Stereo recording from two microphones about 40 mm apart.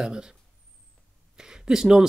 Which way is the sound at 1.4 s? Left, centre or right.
Centre.